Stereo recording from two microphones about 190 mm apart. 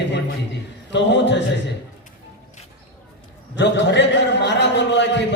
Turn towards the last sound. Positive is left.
turn(degrees=65)  # may be behind; listen again after turning